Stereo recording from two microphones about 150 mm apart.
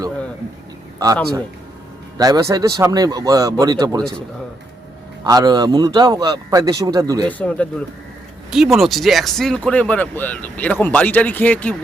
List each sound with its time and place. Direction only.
0.9 s speech: 25° right (ahead or behind)
5.2 s speech: 30° right (ahead or behind)
7.3 s speech: 10° left (ahead or behind)
8.4 s speech: centre (ahead or behind)